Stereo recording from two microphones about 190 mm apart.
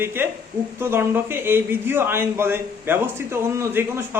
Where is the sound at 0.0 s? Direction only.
10° right (ahead or behind).